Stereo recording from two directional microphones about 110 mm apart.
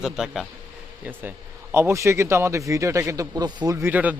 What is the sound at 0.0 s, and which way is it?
Speech, 5° right (ahead or behind).